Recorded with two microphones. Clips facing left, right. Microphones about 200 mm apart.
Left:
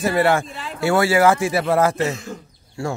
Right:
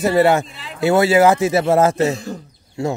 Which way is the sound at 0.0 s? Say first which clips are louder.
Right 4 dB; 20° right (ahead or behind).